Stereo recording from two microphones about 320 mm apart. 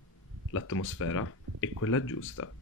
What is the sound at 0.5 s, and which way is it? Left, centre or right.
Speech, left.